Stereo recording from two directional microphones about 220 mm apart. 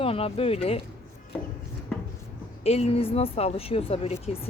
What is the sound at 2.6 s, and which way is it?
Speech, 30° left (ahead or behind).